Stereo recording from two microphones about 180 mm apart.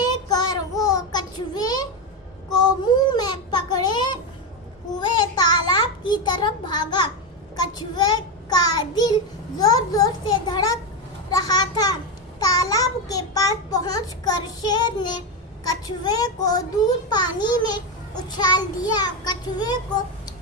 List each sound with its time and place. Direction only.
0.0 s child singing: 20° left (ahead or behind)
2.8 s a sound: 25° left (ahead or behind)
7.6 s a child's voice: 20° left (ahead or behind)